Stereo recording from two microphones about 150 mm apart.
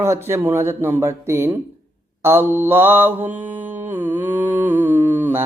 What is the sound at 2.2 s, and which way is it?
Mantra, 15° right (ahead or behind).